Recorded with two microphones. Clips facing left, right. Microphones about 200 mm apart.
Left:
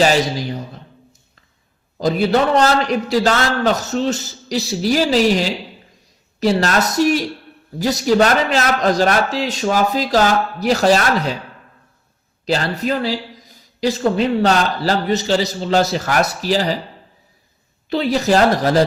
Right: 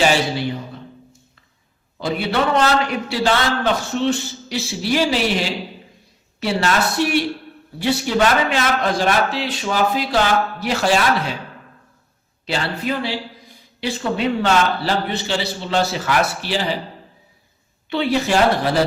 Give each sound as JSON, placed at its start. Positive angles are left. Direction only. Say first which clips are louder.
{"t": 0.1, "sound": "a man's voice", "louder": "left 2 dB", "side_deg": 40}
{"t": 2.0, "sound": "a man's voice", "louder": "left 5 dB", "side_deg": 40}
{"t": 12.5, "sound": "a man's voice", "louder": "left 4 dB", "side_deg": 40}
{"t": 17.8, "sound": "a man's voice", "louder": "left 2 dB", "side_deg": 40}